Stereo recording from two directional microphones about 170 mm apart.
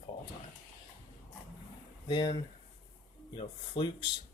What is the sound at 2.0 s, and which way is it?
Speech, 25° left (ahead or behind).